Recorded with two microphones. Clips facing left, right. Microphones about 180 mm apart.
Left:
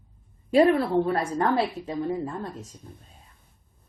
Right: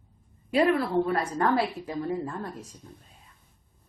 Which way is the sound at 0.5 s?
30° left (ahead or behind).